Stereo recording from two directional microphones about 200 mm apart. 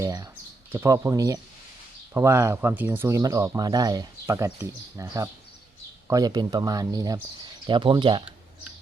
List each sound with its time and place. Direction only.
0.0 s speech: 15° right (ahead or behind)